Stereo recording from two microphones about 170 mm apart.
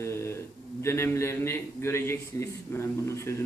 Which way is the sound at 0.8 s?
15° left (ahead or behind).